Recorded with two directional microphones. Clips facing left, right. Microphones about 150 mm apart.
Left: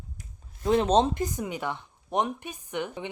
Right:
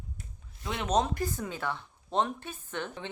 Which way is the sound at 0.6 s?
35° left (ahead or behind).